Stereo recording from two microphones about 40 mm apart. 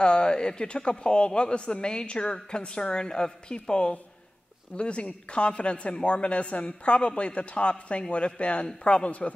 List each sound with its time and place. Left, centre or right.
0.0 s a man's voice: left